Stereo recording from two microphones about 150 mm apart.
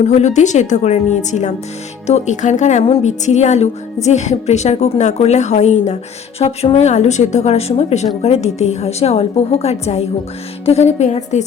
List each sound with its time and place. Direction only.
0.0 s a woman's voice: 50° left (ahead or behind)